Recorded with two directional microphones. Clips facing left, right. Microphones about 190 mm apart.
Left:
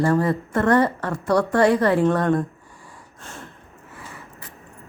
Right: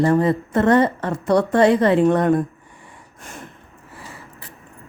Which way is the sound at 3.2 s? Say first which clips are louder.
Right 2 dB; 15° right (ahead or behind).